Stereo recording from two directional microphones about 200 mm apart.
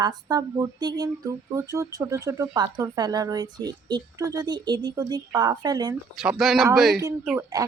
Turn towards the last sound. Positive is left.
turn(degrees=-5)  # may be behind; listen again after turning